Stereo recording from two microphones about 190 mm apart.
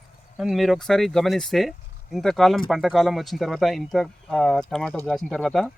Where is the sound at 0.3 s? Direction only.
Centre (ahead or behind).